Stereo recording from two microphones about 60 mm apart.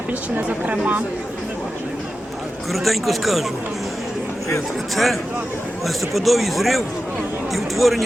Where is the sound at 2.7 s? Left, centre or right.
Centre.